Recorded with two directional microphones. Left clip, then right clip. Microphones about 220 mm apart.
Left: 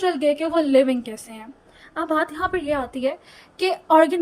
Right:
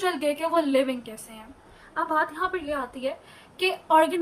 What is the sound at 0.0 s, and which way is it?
A woman's voice, 25° left (ahead or behind).